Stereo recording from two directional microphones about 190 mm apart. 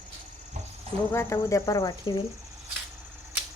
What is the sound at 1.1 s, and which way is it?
Speech, 15° left (ahead or behind).